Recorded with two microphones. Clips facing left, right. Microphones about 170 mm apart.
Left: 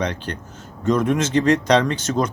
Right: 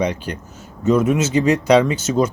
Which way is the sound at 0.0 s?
10° right (ahead or behind).